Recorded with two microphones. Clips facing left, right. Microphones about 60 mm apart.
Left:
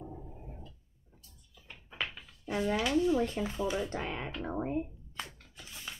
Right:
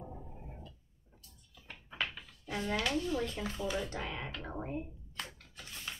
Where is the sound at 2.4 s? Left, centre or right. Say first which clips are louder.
Left 4 dB; centre.